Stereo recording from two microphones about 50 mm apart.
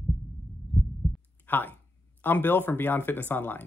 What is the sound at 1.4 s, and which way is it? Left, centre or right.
Speech, left.